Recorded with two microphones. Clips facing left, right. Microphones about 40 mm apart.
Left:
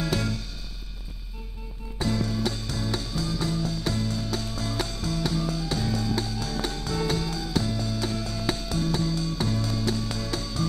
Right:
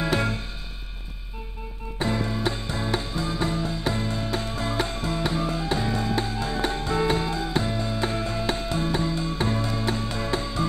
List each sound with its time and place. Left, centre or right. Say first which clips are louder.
0.0 s music: right 3 dB; right
2.0 s music: right 1 dB; right